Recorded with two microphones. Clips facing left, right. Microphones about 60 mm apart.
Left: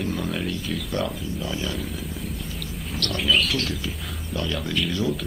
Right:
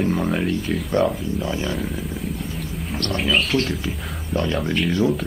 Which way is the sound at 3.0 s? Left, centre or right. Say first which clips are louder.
Right 2 dB; right.